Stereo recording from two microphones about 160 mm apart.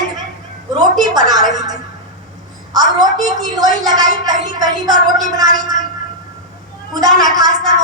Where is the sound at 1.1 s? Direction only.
25° right (ahead or behind).